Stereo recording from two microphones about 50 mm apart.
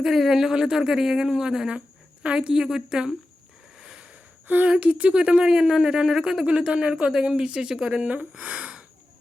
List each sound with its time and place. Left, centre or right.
0.0 s speech: centre; by 2.6 s right
2.6 s speech: centre
3.8 s a sound: centre
4.6 s speech: right; by 6.4 s centre
6.4 s speech: right